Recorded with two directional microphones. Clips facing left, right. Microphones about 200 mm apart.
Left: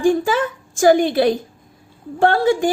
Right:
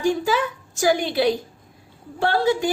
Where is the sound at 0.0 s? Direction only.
50° left (ahead or behind).